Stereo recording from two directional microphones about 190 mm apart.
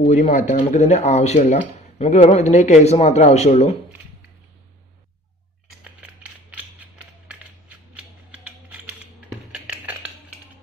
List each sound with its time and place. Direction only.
0.0 s speech: 40° left (ahead or behind)
7.9 s mechanisms: 5° right (ahead or behind)
9.5 s a sound: 10° right (ahead or behind)